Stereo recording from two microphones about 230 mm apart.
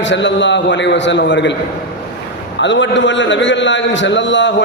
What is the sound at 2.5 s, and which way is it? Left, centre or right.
A man's voice, left.